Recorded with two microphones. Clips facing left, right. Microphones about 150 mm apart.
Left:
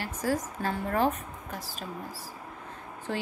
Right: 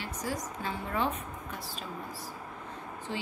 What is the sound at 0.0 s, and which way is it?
A woman's voice, 40° left (ahead or behind).